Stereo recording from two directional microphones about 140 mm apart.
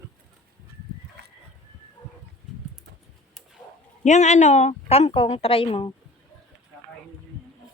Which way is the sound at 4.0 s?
55° left (ahead or behind).